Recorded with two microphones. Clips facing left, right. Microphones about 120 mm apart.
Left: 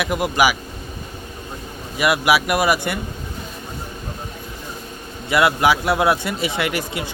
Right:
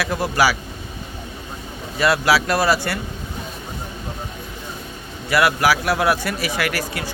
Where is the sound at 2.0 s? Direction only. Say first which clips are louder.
Even; 15° left (ahead or behind).